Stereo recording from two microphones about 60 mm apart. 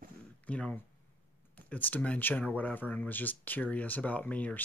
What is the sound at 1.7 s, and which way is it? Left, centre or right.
Speech, left.